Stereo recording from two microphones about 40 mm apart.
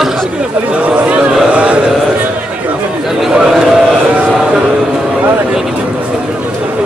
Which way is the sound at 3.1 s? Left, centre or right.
Centre.